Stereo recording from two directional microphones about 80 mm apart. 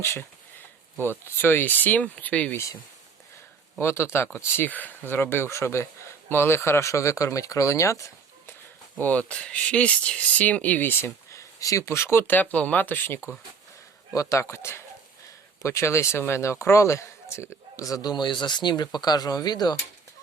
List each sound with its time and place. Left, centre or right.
0.0 s speech: left
1.4 s speech: left
3.8 s speech: left
9.0 s speech: centre; by 12.4 s left
12.4 s speech: centre
14.1 s speech: left
18.1 s speech: left